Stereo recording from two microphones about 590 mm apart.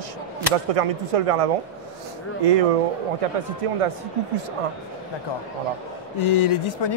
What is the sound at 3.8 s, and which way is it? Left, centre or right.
Speech, right.